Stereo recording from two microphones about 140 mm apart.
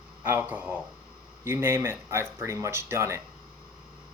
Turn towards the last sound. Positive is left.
turn(degrees=-20)  # may be behind; listen again after turning